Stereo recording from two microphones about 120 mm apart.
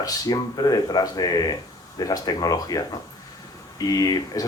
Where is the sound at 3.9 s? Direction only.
30° left (ahead or behind).